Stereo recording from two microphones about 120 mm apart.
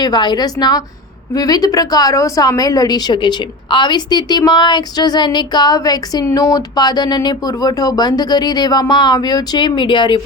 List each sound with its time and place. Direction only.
0.0 s a woman's voice: 35° left (ahead or behind)